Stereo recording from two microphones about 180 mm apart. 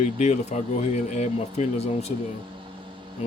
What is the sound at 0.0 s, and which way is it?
Speech, 40° left (ahead or behind).